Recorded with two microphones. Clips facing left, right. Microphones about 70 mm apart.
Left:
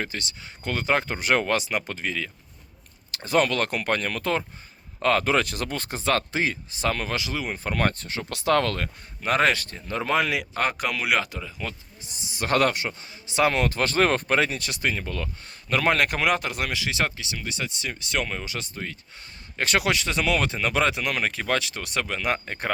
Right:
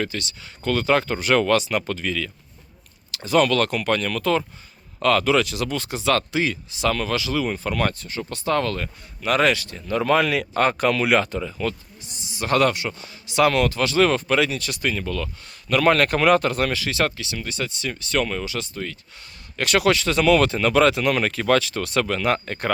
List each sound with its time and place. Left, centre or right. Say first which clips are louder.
0.0 s speech: right 4 dB; left
7.9 s speech: right 2 dB; left
9.2 s speech: right 2 dB; left
9.7 s speech: right 5 dB; left
10.5 s speech: right 6 dB; centre
12.3 s speech: right 3 dB; left
13.0 s speech: right 4 dB; left
18.4 s speech: right 4 dB; left